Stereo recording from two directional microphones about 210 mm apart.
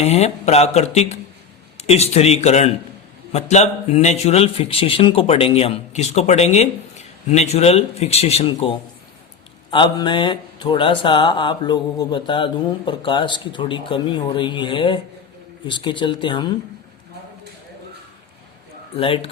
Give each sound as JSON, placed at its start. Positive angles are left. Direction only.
{"t": 0.0, "sound": "speech", "side_deg": 30}
{"t": 18.9, "sound": "speech", "side_deg": 25}